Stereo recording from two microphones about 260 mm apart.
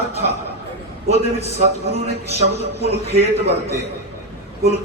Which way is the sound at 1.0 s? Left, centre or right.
Right.